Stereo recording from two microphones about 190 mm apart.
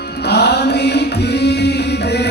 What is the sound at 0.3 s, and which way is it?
Music, 60° left (ahead or behind).